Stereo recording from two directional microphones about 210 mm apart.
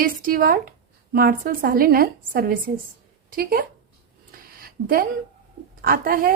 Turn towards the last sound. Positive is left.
turn(degrees=-45)  # may be behind; listen again after turning